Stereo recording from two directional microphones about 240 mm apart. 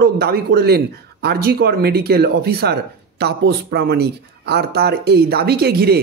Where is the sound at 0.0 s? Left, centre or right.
Right.